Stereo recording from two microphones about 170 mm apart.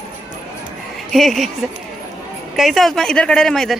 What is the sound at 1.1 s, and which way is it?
Speech, centre (ahead or behind).